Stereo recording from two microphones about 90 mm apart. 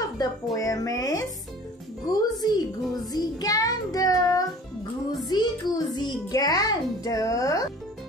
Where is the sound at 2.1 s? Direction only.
45° left (ahead or behind).